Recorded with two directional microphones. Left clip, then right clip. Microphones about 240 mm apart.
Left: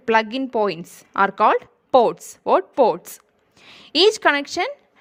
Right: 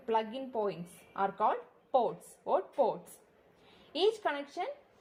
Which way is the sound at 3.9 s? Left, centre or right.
Left.